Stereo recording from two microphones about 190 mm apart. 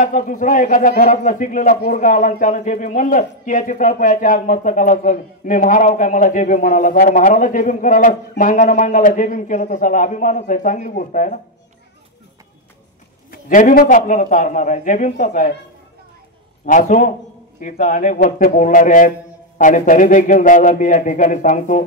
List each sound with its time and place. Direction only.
0.0 s speech: 40° left (ahead or behind)
13.3 s speech: 45° left (ahead or behind)
16.6 s speech: 45° left (ahead or behind)